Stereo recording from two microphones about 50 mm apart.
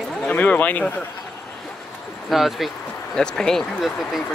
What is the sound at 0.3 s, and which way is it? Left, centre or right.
Speech, left.